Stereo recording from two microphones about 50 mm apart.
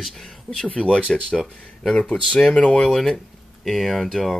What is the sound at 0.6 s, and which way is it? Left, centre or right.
Speech, left.